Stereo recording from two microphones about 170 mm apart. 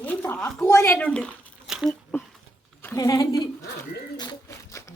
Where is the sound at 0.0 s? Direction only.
10° left (ahead or behind).